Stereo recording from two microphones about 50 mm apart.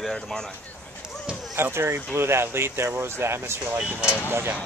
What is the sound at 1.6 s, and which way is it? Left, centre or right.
Speech, right.